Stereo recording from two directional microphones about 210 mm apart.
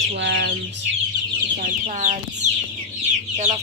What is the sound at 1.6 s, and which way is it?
Speech, 35° right (ahead or behind).